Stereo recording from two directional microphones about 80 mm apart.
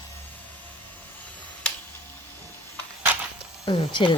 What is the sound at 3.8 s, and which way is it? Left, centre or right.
Speech, left.